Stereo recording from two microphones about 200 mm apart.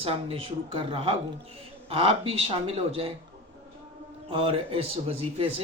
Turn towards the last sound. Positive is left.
turn(degrees=-30)  # may be behind; listen again after turning